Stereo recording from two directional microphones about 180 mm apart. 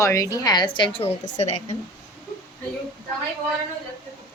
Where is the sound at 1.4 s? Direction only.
40° left (ahead or behind).